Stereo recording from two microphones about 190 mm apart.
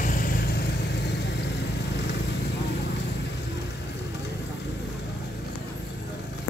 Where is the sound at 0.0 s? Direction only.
45° left (ahead or behind); by 2.0 s 65° left (ahead or behind).